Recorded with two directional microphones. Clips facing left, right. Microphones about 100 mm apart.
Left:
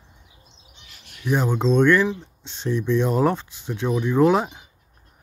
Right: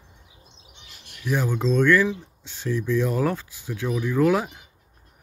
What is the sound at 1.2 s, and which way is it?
Speech, 25° left (ahead or behind).